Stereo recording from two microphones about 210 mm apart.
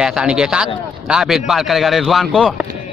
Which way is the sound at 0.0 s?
5° right (ahead or behind).